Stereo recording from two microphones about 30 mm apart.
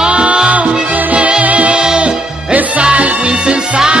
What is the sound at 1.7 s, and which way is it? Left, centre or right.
Music, right.